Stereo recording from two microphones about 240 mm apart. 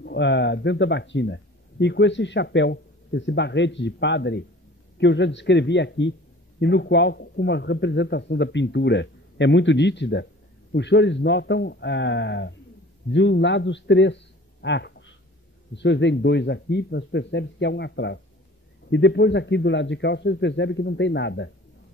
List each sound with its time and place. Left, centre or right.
0.0 s a man's voice: left